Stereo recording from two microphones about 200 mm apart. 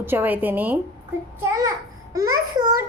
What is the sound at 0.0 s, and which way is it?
A child's voice, 10° right (ahead or behind).